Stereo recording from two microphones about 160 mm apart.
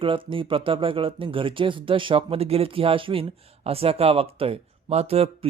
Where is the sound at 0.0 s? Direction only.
35° right (ahead or behind).